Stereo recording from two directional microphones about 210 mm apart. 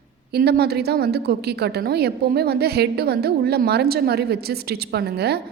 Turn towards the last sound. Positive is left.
turn(degrees=-50)  # may be behind; listen again after turning